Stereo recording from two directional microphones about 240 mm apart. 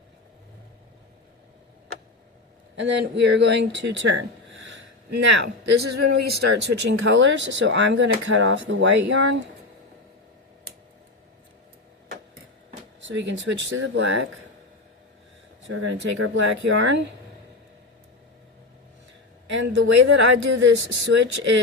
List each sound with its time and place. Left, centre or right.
2.7 s speech: right
13.0 s speech: right
15.6 s speech: right
19.5 s speech: right